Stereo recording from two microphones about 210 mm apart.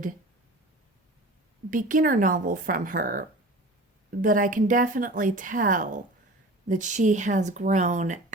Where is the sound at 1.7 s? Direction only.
40° right (ahead or behind).